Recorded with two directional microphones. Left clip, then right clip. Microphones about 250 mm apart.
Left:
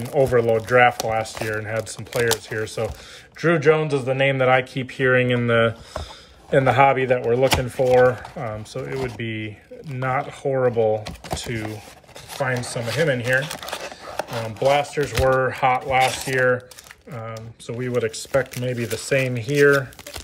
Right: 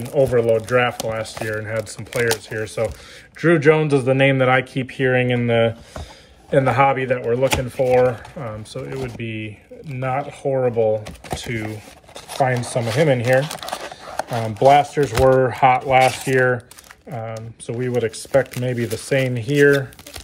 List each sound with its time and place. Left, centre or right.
0.0 s speech: centre
9.3 s speech: left
9.9 s speech: centre
12.5 s speech: centre
17.6 s speech: centre